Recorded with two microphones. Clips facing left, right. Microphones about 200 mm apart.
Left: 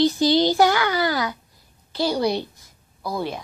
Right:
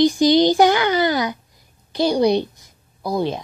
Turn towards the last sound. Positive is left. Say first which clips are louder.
# right 5 dB
turn(degrees=-20)  # may be behind; listen again after turning